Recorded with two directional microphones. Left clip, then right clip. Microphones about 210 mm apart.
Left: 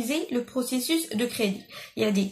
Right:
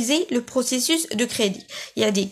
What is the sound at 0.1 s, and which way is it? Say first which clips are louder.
Speech: right 7 dB; 50° right (ahead or behind).